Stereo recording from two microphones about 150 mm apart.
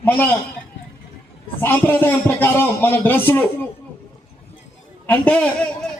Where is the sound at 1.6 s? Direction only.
15° left (ahead or behind).